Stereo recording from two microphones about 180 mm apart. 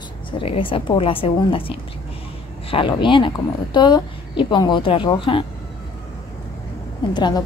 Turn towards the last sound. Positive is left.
turn(degrees=25)  # may be behind; listen again after turning